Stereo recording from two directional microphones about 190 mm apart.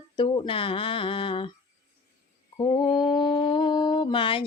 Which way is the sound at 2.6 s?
25° left (ahead or behind).